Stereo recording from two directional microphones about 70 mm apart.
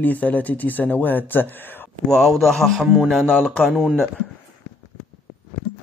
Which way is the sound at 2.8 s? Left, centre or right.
Centre.